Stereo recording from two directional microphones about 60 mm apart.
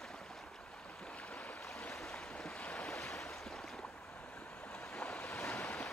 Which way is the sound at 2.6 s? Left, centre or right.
Left.